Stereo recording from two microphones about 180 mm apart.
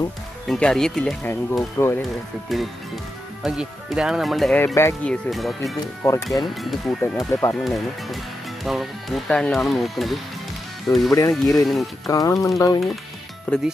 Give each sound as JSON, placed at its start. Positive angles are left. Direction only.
{"t": 0.5, "sound": "speech", "side_deg": 5}
{"t": 4.7, "sound": "speech", "side_deg": 10}
{"t": 7.2, "sound": "speech", "side_deg": 20}
{"t": 7.5, "sound": "speech", "side_deg": 0}
{"t": 12.1, "sound": "speech", "side_deg": 20}